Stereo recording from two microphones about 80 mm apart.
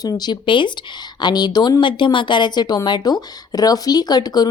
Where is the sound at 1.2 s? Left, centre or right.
Left.